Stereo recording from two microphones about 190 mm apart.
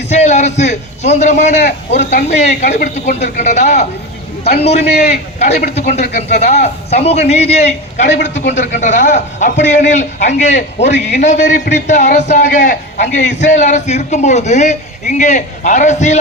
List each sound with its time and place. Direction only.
0.1 s a man's voice: 35° left (ahead or behind)